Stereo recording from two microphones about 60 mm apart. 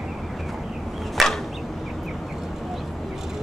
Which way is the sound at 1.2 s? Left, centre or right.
Centre.